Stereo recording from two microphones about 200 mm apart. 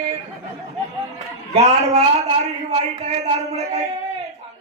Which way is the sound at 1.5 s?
35° right (ahead or behind).